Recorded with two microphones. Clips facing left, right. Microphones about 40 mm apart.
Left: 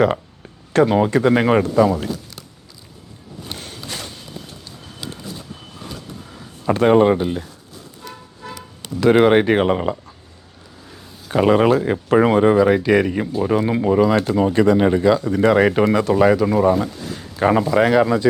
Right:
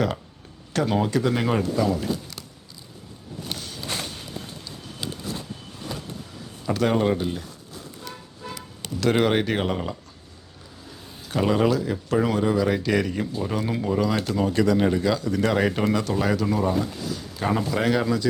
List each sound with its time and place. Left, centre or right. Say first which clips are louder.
0.7 s speech: left 8 dB; left
1.1 s speech: left 8 dB; left
3.5 s a sound: left 2 dB; left
6.7 s speech: left 8 dB; left
8.5 s speech: left 6 dB; centre
11.3 s speech: left 7 dB; left
12.6 s speech: left 7 dB; left
16.7 s a sound: left 4 dB; left
17.3 s speech: left 9 dB; left
17.7 s speech: left 7 dB; centre
18.0 s speech: left 7 dB; left